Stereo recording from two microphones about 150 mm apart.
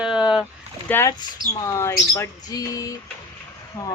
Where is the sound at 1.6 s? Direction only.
20° left (ahead or behind).